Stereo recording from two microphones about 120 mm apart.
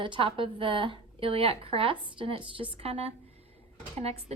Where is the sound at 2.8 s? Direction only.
60° right (ahead or behind).